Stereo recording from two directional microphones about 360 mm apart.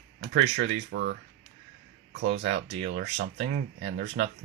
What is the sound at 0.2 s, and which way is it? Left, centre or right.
Speech, right.